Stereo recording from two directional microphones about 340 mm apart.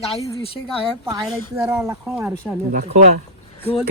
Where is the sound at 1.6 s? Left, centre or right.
Centre.